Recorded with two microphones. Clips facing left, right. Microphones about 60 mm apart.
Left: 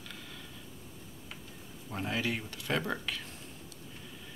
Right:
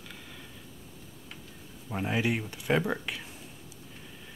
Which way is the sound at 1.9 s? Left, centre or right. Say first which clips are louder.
Right 5 dB; centre.